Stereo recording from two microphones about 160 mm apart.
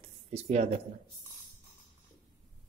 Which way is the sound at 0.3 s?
40° right (ahead or behind).